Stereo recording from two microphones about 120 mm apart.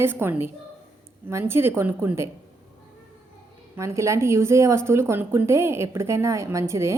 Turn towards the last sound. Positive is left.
turn(degrees=-25)  # may be behind; listen again after turning